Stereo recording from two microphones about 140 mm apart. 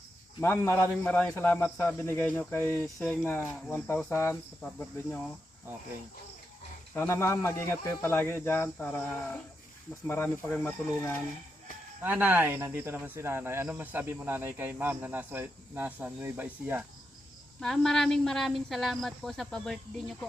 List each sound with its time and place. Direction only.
0.4 s a man's voice: 15° left (ahead or behind)
2.8 s a man's voice: 5° left (ahead or behind)
6.9 s a man's voice: 15° left (ahead or behind)
12.0 s speech: 10° right (ahead or behind)
17.6 s speech: 5° left (ahead or behind)